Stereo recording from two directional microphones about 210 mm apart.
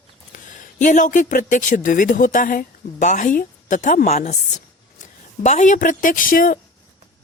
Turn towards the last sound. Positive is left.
turn(degrees=40)  # may be behind; listen again after turning